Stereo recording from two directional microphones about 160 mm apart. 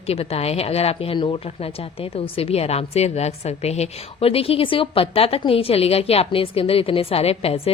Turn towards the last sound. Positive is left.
turn(degrees=40)  # may be behind; listen again after turning